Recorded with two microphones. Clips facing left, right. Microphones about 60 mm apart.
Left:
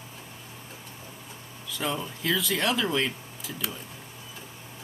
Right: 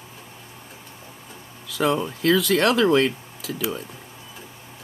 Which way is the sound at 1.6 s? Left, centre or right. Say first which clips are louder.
Right 9 dB; right.